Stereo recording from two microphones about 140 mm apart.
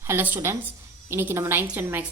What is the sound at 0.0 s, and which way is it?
A woman's voice, 15° right (ahead or behind).